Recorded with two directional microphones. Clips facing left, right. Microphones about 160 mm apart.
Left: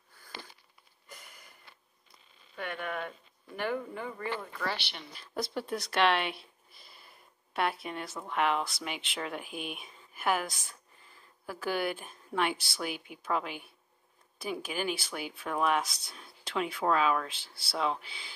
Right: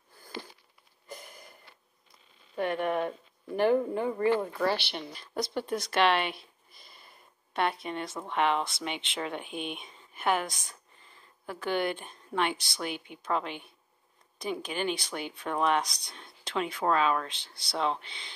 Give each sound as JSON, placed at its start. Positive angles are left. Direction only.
{"t": 2.5, "sound": "speech", "side_deg": -40}
{"t": 5.1, "sound": "speech", "side_deg": 0}